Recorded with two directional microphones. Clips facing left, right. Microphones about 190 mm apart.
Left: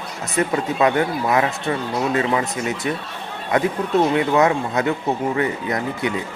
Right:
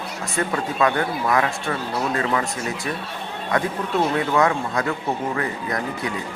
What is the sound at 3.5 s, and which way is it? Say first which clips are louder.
Speech: left 4 dB; 20° left (ahead or behind).